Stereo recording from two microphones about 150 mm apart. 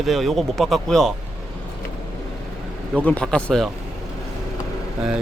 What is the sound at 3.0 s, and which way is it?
Speech, 10° left (ahead or behind).